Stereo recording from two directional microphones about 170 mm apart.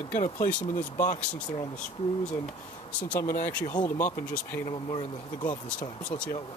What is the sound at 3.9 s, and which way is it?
Speech, 10° left (ahead or behind).